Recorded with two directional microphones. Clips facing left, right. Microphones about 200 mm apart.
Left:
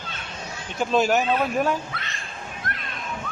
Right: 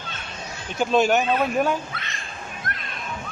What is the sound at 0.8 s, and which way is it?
Speech, centre (ahead or behind).